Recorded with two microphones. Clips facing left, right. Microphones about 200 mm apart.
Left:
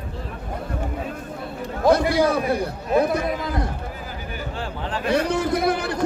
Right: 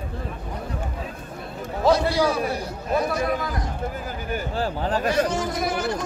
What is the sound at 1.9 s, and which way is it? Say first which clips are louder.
A man's voice: left 2 dB; 55° left (ahead or behind).